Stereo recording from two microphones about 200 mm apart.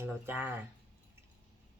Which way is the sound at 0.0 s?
10° right (ahead or behind).